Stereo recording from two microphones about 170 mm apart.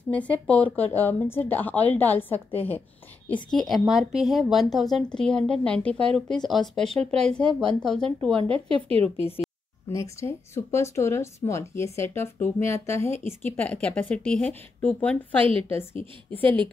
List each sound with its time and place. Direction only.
0.1 s speech: 10° left (ahead or behind)
3.5 s a woman's voice: centre (ahead or behind)
8.4 s speech: 35° right (ahead or behind)
9.9 s speech: 15° left (ahead or behind)